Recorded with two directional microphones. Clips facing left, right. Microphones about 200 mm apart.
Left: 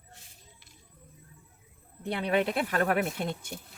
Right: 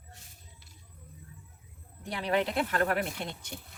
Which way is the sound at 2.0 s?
60° left (ahead or behind).